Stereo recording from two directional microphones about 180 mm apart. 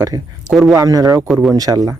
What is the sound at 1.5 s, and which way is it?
Speech, 20° right (ahead or behind).